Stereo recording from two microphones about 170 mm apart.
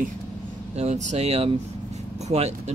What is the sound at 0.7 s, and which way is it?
Speech, 40° right (ahead or behind).